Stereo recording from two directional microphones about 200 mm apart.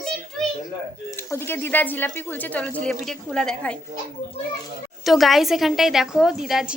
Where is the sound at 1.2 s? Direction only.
10° left (ahead or behind).